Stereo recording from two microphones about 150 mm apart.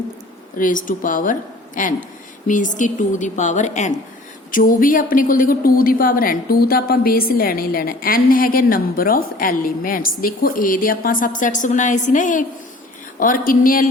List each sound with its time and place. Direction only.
0.6 s a woman's voice: 60° left (ahead or behind)
4.5 s a woman's voice: 65° left (ahead or behind)